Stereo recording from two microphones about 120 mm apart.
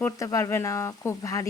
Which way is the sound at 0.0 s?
25° left (ahead or behind).